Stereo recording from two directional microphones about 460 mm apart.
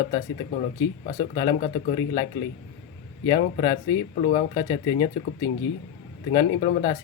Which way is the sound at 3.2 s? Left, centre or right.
Centre.